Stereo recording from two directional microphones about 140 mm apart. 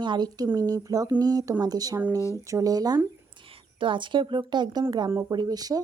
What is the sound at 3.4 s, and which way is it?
Speech, 40° right (ahead or behind).